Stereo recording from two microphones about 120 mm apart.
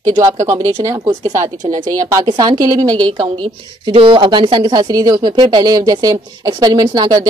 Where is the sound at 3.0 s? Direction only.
45° right (ahead or behind).